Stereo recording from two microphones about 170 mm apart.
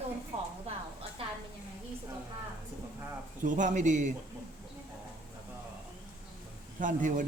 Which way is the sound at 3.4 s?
50° right (ahead or behind).